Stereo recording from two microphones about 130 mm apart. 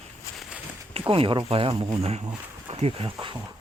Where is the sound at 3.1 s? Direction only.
35° right (ahead or behind).